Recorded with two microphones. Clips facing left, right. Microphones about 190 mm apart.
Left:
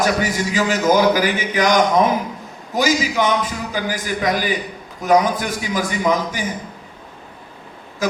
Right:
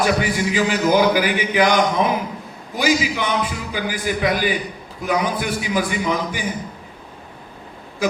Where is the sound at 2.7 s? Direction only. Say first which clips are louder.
Left 1 dB; 45° left (ahead or behind).